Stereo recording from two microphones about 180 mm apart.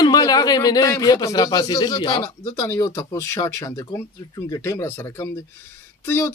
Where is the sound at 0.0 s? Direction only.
20° left (ahead or behind).